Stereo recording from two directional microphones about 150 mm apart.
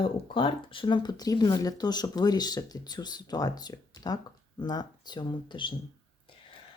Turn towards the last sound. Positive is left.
turn(degrees=30)  # may be behind; listen again after turning